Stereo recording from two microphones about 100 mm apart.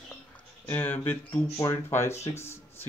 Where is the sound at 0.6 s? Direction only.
15° left (ahead or behind).